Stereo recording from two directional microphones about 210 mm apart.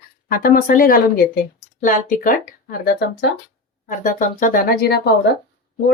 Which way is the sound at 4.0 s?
40° left (ahead or behind).